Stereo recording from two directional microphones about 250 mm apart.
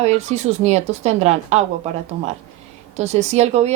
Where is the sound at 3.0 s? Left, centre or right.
Right.